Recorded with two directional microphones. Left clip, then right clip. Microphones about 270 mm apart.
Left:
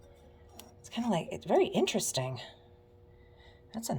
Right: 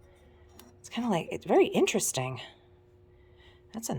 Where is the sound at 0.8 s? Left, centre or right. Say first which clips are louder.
Right 2 dB; centre.